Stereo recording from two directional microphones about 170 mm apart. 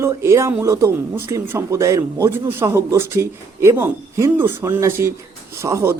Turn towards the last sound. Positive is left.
turn(degrees=-15)  # may be behind; listen again after turning